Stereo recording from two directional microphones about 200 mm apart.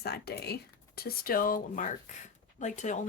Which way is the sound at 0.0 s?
55° left (ahead or behind).